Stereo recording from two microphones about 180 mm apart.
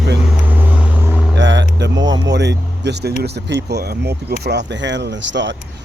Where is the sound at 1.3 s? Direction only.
90° right.